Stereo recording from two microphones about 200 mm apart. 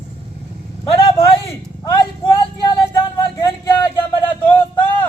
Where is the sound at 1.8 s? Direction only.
15° left (ahead or behind).